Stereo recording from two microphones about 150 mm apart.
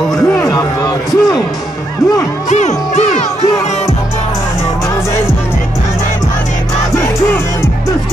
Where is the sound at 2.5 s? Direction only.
45° left (ahead or behind).